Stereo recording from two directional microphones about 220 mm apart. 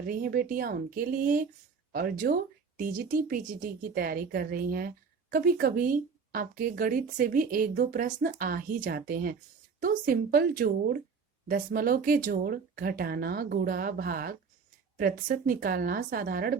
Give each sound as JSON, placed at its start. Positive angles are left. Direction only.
{"t": 0.1, "sound": "speech", "side_deg": -40}